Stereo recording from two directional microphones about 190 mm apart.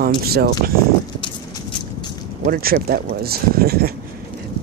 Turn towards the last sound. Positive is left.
turn(degrees=-55)  # may be behind; listen again after turning